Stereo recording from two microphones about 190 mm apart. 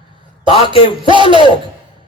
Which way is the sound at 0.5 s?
30° left (ahead or behind).